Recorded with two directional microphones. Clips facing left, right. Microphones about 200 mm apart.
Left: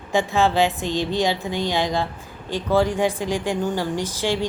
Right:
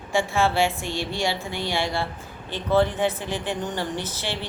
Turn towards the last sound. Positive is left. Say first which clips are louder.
# left 7 dB
turn(degrees=15)  # may be behind; listen again after turning